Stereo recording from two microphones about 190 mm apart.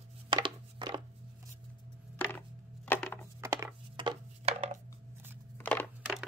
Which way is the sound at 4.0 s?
30° right (ahead or behind).